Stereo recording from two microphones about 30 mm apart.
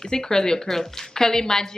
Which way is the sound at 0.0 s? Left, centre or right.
Centre.